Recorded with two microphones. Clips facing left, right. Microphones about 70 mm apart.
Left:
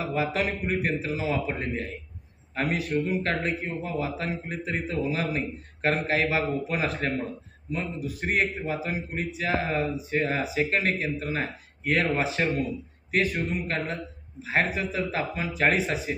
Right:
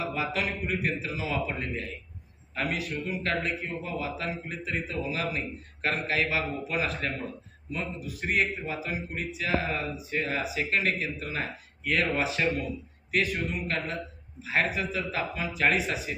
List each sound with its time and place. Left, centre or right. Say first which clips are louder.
0.1 s a man's voice: left 3 dB; left